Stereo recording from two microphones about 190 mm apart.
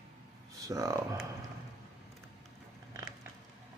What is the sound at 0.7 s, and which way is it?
Speech, 15° right (ahead or behind).